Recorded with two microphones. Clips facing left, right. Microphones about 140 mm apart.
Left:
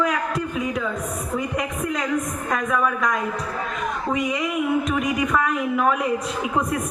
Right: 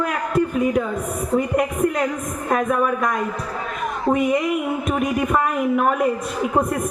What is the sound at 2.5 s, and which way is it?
Speech, 50° right (ahead or behind).